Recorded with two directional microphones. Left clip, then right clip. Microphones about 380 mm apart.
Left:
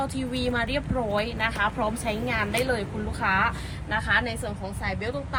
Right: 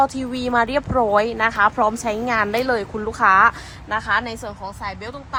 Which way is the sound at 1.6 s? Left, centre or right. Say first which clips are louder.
Right 9 dB; right.